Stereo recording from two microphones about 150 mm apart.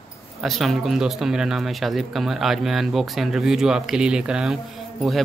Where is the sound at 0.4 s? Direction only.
Centre (ahead or behind).